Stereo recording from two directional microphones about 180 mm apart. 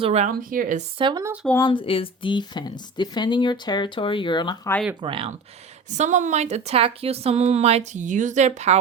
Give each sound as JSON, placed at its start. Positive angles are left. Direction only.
{"t": 0.0, "sound": "a woman's voice", "side_deg": -35}
{"t": 0.3, "sound": "speech", "side_deg": -50}
{"t": 0.9, "sound": "speech", "side_deg": -25}
{"t": 1.6, "sound": "speech", "side_deg": 30}
{"t": 4.9, "sound": "speech", "side_deg": -30}
{"t": 5.9, "sound": "a woman's voice", "side_deg": -40}